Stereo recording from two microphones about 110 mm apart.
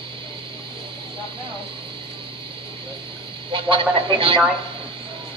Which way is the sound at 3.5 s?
50° right (ahead or behind).